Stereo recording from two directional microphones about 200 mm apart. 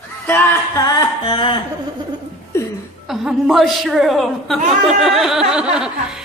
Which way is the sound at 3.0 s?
Centre (ahead or behind).